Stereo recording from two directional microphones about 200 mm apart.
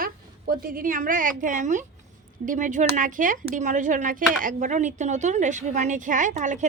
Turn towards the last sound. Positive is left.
turn(degrees=-40)  # may be behind; listen again after turning